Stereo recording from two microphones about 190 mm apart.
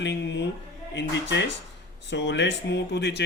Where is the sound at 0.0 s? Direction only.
65° left (ahead or behind).